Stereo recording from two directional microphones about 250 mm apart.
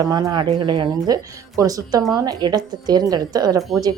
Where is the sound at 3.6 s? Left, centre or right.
Centre.